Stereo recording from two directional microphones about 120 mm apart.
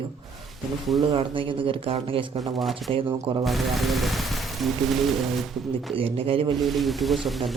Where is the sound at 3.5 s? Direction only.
Centre (ahead or behind).